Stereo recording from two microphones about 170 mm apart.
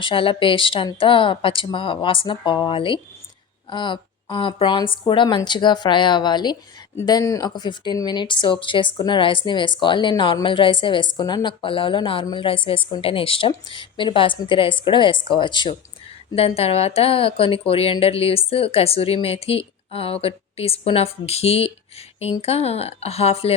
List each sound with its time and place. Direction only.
0.0 s speech: 30° left (ahead or behind)